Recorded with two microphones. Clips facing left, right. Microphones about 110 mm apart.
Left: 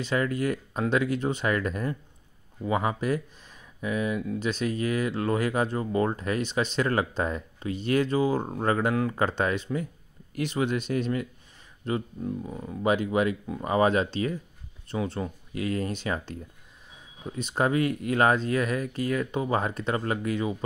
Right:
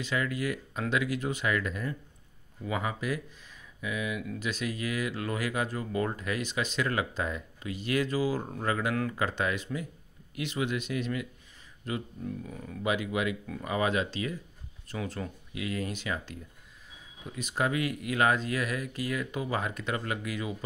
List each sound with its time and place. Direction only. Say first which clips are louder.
0.0 s speech: left 5 dB; 35° left (ahead or behind)